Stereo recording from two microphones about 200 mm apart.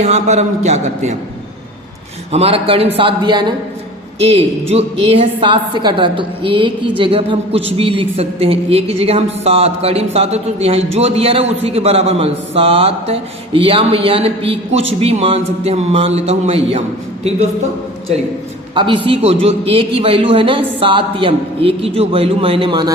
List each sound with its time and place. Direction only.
0.0 s a man's voice: 35° right (ahead or behind)
2.3 s a woman's voice: 30° right (ahead or behind)
18.7 s a woman's voice: 25° right (ahead or behind)